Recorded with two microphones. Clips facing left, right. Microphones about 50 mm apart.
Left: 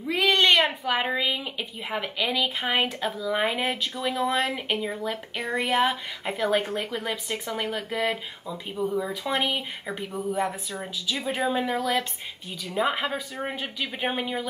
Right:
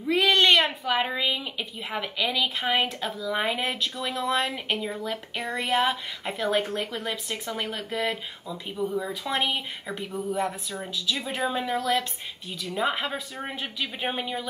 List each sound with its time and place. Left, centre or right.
0.0 s a sound: centre
0.8 s a woman's voice: centre
10.8 s a woman's voice: centre